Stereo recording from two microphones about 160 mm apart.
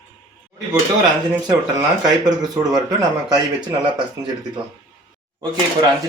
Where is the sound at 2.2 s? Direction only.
25° right (ahead or behind).